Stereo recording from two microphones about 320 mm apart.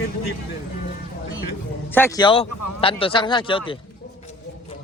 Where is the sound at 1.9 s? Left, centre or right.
Centre.